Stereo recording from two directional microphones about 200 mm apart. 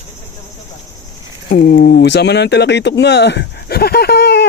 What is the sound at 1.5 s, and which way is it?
Speech, 50° left (ahead or behind).